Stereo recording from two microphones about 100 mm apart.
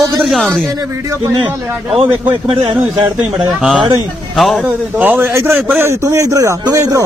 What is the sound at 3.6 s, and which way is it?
A man's voice, 5° right (ahead or behind).